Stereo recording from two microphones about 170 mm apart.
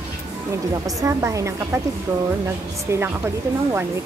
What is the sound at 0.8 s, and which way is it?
Speech, 20° right (ahead or behind).